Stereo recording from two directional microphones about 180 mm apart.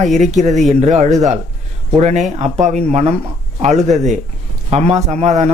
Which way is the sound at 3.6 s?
40° right (ahead or behind).